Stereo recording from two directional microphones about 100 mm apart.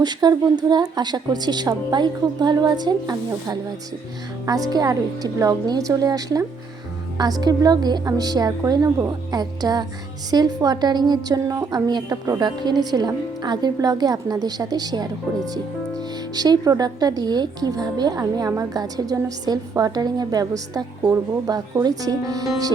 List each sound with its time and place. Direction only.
0.0 s a woman's voice: 45° right (ahead or behind)
4.7 s a woman's voice: 40° right (ahead or behind)